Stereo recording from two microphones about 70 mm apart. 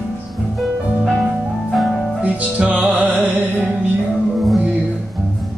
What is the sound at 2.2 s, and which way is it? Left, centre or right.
Music, centre.